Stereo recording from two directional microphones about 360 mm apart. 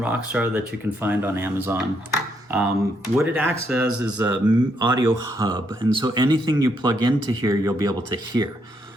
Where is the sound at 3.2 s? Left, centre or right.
Centre.